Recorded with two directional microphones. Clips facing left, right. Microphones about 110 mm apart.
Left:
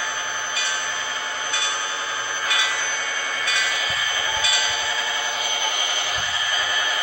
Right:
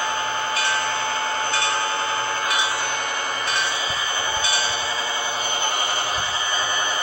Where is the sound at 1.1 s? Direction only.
35° right (ahead or behind).